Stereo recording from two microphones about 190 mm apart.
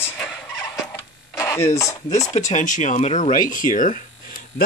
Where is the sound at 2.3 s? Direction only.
40° left (ahead or behind).